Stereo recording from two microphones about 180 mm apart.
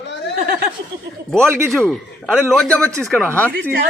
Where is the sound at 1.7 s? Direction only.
Centre (ahead or behind).